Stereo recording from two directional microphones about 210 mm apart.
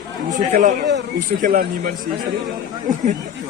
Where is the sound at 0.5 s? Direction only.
45° right (ahead or behind).